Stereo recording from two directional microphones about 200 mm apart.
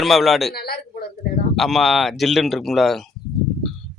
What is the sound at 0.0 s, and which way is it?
Speech, centre (ahead or behind).